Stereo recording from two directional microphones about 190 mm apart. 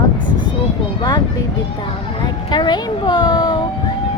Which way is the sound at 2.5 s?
25° left (ahead or behind).